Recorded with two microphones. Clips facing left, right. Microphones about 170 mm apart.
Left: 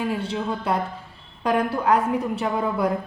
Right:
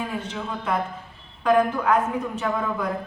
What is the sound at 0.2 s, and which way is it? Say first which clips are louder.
A woman's voice: left 4 dB; 35° left (ahead or behind).